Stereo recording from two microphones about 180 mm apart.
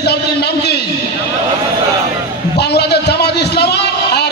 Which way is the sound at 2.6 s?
65° left (ahead or behind).